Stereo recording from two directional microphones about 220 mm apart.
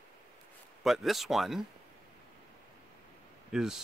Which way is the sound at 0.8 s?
Centre (ahead or behind).